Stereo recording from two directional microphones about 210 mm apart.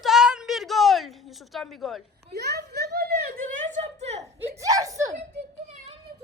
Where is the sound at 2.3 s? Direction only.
50° right (ahead or behind); by 4.2 s 35° right (ahead or behind).